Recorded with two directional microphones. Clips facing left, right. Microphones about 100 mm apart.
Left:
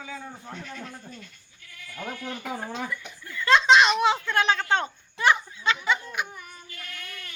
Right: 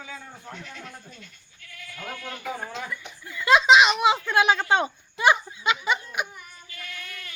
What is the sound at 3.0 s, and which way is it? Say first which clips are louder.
Speech: left 1 dB; 15° right (ahead or behind).